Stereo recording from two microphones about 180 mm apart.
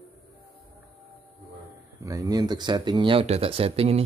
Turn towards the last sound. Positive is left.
turn(degrees=-35)  # may be behind; listen again after turning